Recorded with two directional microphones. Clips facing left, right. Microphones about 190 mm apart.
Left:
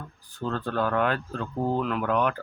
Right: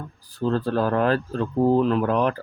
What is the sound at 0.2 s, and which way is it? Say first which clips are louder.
Speech: right 7 dB; 35° right (ahead or behind).